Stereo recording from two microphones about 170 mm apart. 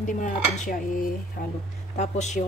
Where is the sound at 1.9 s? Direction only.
40° left (ahead or behind).